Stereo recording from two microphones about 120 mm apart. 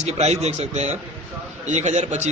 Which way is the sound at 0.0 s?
65° right (ahead or behind).